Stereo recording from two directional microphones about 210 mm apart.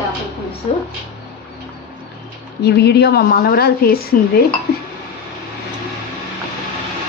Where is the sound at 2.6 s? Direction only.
50° left (ahead or behind).